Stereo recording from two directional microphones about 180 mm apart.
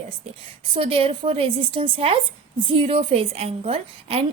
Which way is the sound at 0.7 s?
30° right (ahead or behind).